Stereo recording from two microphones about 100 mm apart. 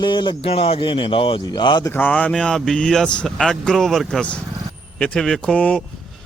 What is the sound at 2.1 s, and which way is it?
Speech, 5° left (ahead or behind).